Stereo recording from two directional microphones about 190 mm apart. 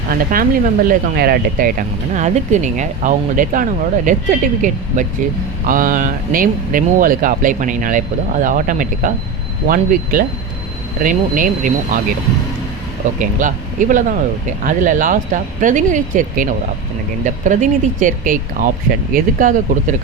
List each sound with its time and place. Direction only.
0.1 s speech: 50° right (ahead or behind)
2.1 s speech: 40° right (ahead or behind)
13.1 s speech: 45° right (ahead or behind)